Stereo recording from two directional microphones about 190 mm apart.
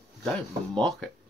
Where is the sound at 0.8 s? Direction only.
5° left (ahead or behind).